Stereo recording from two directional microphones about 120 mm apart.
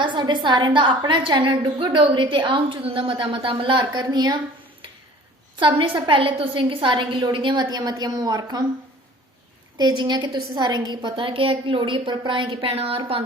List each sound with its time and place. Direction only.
0.0 s a woman's voice: 40° right (ahead or behind)
5.5 s a woman's voice: 45° right (ahead or behind)
9.7 s a woman's voice: 35° right (ahead or behind)
12.6 s speech: 50° right (ahead or behind)